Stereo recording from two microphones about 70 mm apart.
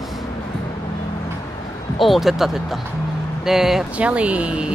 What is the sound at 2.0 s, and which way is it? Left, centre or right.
Speech, centre.